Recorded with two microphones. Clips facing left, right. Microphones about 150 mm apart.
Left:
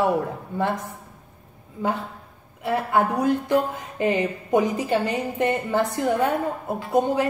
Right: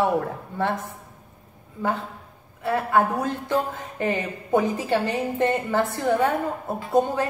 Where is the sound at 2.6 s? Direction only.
15° left (ahead or behind).